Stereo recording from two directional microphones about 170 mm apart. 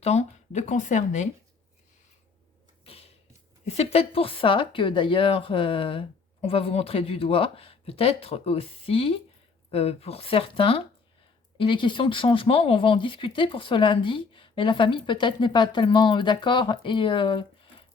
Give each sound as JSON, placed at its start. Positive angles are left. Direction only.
{"t": 0.0, "sound": "speech", "side_deg": 40}
{"t": 2.8, "sound": "a sound", "side_deg": 35}
{"t": 3.8, "sound": "a woman's voice", "side_deg": 35}